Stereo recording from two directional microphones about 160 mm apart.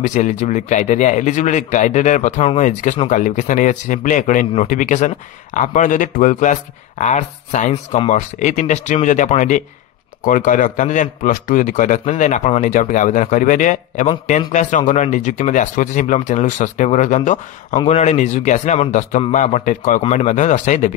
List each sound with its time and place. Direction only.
0.0 s a man's voice: 50° left (ahead or behind)